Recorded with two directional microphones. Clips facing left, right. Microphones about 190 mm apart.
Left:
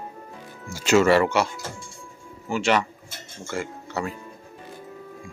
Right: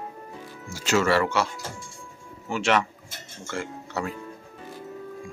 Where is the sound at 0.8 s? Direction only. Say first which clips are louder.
Left 5 dB; 20° left (ahead or behind).